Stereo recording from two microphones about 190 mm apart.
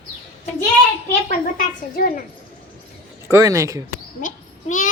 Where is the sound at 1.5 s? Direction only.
45° left (ahead or behind).